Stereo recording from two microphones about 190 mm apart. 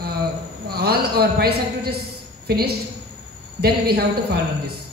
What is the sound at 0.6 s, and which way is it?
A man's voice, 55° right (ahead or behind).